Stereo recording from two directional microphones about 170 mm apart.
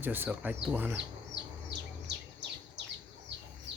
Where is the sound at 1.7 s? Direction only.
90° right.